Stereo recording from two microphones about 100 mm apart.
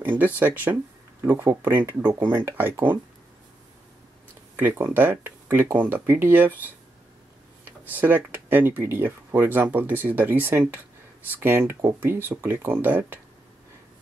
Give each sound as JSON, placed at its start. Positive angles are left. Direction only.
{"t": 0.0, "sound": "speech", "side_deg": -20}
{"t": 4.6, "sound": "speech", "side_deg": -15}
{"t": 7.6, "sound": "speech", "side_deg": -20}